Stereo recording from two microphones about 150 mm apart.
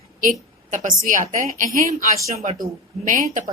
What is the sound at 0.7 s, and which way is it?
A woman's voice, 60° right (ahead or behind).